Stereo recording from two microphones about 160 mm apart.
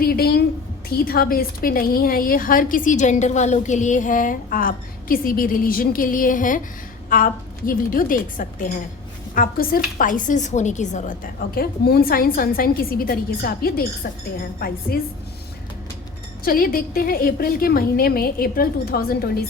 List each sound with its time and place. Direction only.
0.0 s a sound: 70° left (ahead or behind)
0.9 s a woman's voice: 70° left (ahead or behind)
14.9 s a woman's voice: 80° left
16.4 s a woman's voice: 65° left (ahead or behind)